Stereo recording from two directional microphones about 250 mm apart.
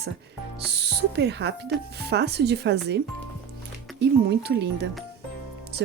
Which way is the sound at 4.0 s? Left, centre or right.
Right.